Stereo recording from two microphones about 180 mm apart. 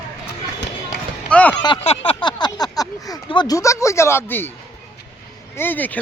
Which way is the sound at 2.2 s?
25° left (ahead or behind).